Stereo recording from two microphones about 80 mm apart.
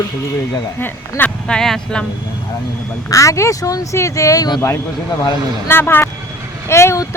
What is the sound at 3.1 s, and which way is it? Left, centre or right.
Speech, left.